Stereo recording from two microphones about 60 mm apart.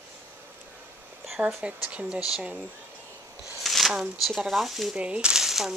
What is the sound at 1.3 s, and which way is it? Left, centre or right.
Speech, centre.